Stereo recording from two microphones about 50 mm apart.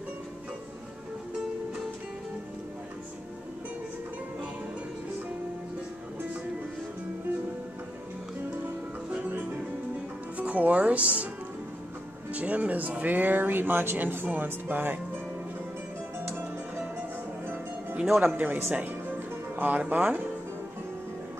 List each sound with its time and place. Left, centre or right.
10.3 s speech: right
12.3 s speech: right
18.2 s speech: right
19.5 s music: right
19.9 s speech: right